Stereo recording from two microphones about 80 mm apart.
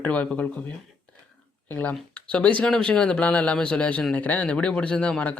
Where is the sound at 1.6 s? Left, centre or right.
Left.